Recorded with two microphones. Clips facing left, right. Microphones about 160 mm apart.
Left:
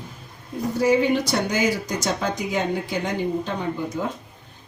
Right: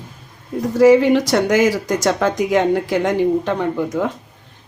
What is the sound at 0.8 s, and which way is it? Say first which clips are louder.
Speech: right 8 dB; 80° right.